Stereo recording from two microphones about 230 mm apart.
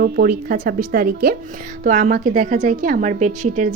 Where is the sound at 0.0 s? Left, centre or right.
Right.